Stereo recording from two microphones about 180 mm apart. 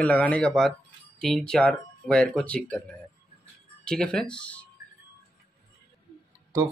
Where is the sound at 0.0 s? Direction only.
10° left (ahead or behind).